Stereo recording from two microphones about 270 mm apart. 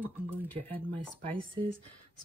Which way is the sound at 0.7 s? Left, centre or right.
Centre.